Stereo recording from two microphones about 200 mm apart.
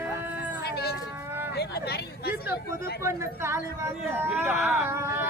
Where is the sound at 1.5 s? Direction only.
55° left (ahead or behind).